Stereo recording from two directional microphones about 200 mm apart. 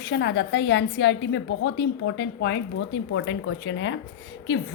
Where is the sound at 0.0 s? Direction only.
60° left (ahead or behind).